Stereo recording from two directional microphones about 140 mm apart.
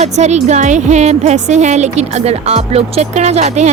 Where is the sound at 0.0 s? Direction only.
55° right (ahead or behind).